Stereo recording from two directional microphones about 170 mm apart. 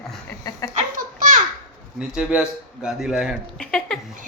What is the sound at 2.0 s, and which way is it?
A man's voice, 5° right (ahead or behind).